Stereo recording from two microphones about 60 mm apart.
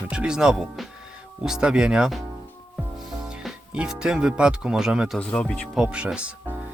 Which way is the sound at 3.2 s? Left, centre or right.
Centre.